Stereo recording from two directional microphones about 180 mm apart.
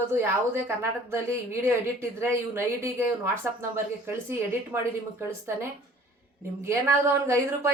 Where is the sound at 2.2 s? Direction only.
15° right (ahead or behind).